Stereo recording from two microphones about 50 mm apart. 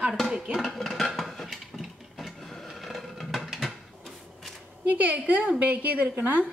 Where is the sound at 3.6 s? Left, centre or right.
Centre.